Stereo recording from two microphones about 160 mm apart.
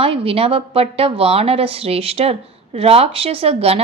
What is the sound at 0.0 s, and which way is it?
A woman's voice, 35° right (ahead or behind).